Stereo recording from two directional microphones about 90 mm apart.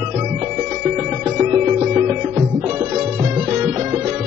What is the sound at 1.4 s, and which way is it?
Music, 20° right (ahead or behind).